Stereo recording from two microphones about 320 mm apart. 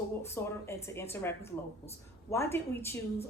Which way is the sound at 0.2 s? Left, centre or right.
Centre.